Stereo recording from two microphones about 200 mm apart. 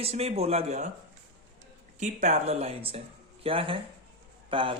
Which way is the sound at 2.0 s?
35° right (ahead or behind).